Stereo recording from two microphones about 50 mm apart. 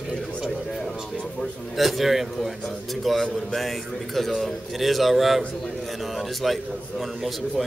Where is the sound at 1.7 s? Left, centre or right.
Centre.